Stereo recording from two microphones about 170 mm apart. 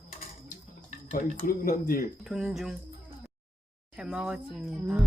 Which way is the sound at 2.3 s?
Centre (ahead or behind).